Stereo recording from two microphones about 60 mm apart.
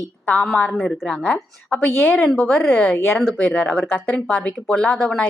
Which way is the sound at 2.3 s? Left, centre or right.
Centre.